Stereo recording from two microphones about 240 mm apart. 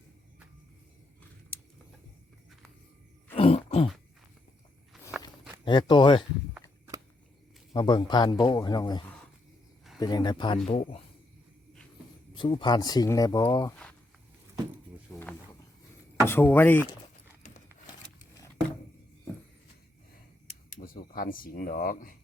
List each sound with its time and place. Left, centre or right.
3.3 s throat clearing: left
5.6 s speech: centre
6.5 s walk: centre
7.7 s speech: centre
12.3 s speech: centre
15.1 s a sound: centre
16.2 s speech: centre
20.7 s speech: left